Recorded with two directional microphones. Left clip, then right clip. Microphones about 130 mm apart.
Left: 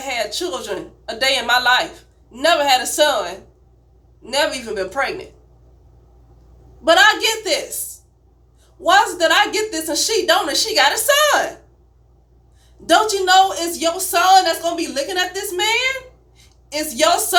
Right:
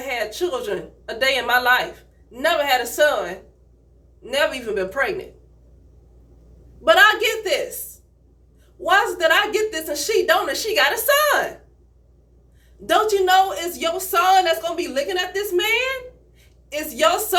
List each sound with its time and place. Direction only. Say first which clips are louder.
0.0 s a sound: left 2 dB; 40° right (ahead or behind)
1.2 s speech: left 2 dB; 45° right (ahead or behind)
4.4 s speech: left 1 dB; 40° right (ahead or behind)
6.8 s speech: left 1 dB; 40° right (ahead or behind)
8.8 s speech: left 3 dB; 40° right (ahead or behind)
12.8 s speech: left 2 dB; 45° right (ahead or behind)